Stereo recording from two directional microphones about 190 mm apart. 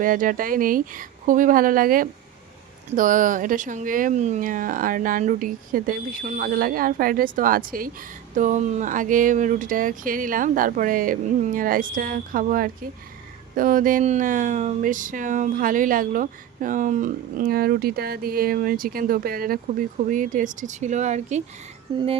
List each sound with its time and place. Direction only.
0.0 s speech: 45° right (ahead or behind)
21.9 s music: 30° right (ahead or behind)